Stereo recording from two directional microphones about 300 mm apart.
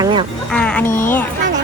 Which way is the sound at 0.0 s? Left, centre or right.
Centre.